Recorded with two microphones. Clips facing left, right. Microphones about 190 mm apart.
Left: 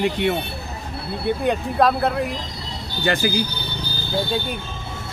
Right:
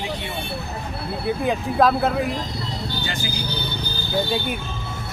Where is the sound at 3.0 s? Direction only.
60° left (ahead or behind).